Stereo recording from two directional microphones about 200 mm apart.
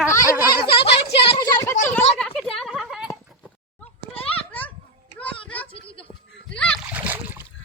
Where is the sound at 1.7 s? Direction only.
35° left (ahead or behind).